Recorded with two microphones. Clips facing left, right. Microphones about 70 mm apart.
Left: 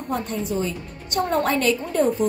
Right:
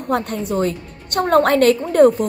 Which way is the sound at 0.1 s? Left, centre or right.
Right.